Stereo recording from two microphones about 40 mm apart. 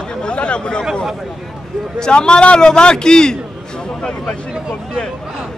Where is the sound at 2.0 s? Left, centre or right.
Left.